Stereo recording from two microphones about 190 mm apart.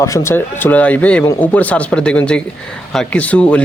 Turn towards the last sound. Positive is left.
turn(degrees=5)  # may be behind; listen again after turning